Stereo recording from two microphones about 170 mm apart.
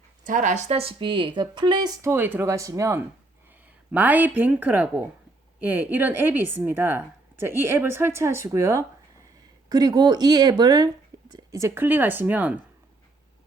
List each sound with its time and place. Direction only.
0.3 s a woman's voice: 45° right (ahead or behind); by 12.5 s 10° right (ahead or behind)